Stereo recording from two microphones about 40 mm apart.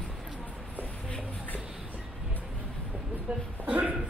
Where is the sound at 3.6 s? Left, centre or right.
Right.